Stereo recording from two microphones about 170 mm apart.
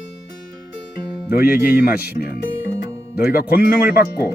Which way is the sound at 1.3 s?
65° left (ahead or behind).